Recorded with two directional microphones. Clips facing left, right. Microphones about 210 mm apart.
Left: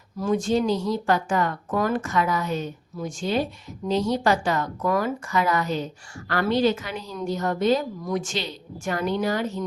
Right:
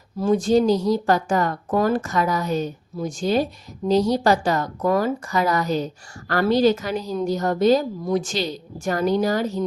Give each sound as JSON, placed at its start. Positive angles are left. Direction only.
{"t": 0.2, "sound": "speech", "side_deg": -35}